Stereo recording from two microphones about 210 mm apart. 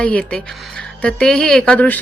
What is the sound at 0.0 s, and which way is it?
Speech, 5° left (ahead or behind).